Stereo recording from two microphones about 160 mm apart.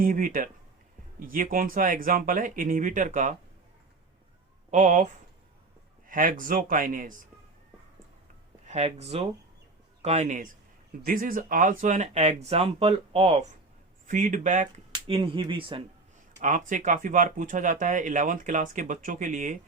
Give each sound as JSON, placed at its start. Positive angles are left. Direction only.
{"t": 0.0, "sound": "speech", "side_deg": -60}
{"t": 4.7, "sound": "speech", "side_deg": -50}
{"t": 6.1, "sound": "speech", "side_deg": -60}
{"t": 8.6, "sound": "speech", "side_deg": -45}
{"t": 11.0, "sound": "speech", "side_deg": -60}
{"t": 14.1, "sound": "speech", "side_deg": -55}
{"t": 14.9, "sound": "speech", "side_deg": -35}
{"t": 16.4, "sound": "speech", "side_deg": -55}